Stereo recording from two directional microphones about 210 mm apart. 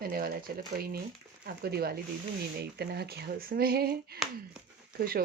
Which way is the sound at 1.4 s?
45° right (ahead or behind).